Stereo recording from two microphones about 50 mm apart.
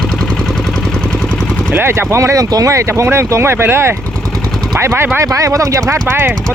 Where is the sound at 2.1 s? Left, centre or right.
Right.